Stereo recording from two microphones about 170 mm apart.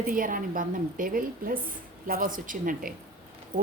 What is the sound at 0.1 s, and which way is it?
A woman's voice, 55° right (ahead or behind).